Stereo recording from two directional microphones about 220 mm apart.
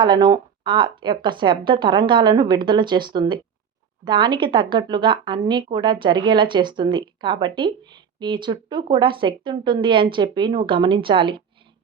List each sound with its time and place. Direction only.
0.0 s a woman's voice: 20° right (ahead or behind)